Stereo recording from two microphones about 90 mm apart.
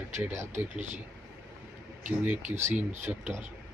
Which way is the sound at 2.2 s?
20° right (ahead or behind).